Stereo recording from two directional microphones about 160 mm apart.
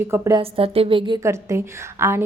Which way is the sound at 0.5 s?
35° right (ahead or behind).